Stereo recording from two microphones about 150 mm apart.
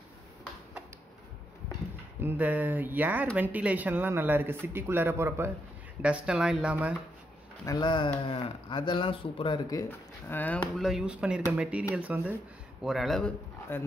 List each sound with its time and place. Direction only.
2.2 s speech: 10° right (ahead or behind)
7.6 s speech: 30° left (ahead or behind)
9.8 s speech: 15° left (ahead or behind)
10.8 s speech: centre (ahead or behind)
13.7 s speech: 15° left (ahead or behind)